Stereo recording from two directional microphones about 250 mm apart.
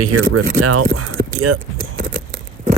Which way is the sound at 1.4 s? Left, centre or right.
Right.